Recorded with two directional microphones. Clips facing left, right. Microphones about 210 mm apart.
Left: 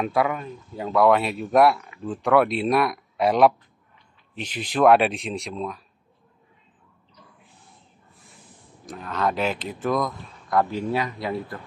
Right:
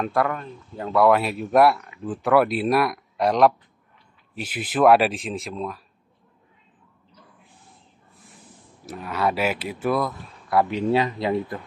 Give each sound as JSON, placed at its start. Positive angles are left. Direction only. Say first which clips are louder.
{"t": 0.0, "sound": "speech", "louder": "even", "side_deg": 5}
{"t": 8.8, "sound": "speech", "louder": "right 1 dB", "side_deg": -5}
{"t": 10.7, "sound": "speech", "louder": "right 4 dB", "side_deg": -25}